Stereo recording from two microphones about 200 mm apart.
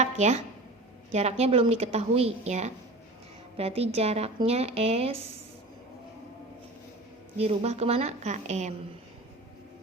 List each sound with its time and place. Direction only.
0.0 s a woman's voice: 35° right (ahead or behind)
7.3 s a woman's voice: 30° right (ahead or behind)